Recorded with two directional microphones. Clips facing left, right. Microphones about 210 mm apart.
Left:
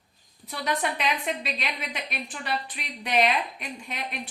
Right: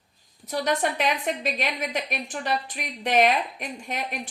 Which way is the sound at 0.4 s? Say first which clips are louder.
Right 4 dB; 45° right (ahead or behind).